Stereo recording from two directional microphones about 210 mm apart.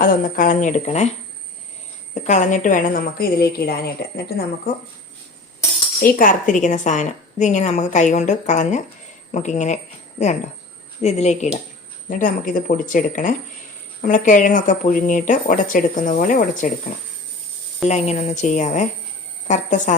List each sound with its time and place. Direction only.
0.0 s a woman's voice: 40° left (ahead or behind)
2.2 s a woman's voice: 35° left (ahead or behind)
6.0 s a woman's voice: 40° left (ahead or behind)
17.8 s a woman's voice: 30° left (ahead or behind)